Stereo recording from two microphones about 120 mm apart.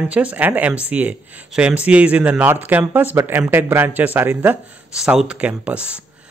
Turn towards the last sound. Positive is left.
turn(degrees=-10)  # may be behind; listen again after turning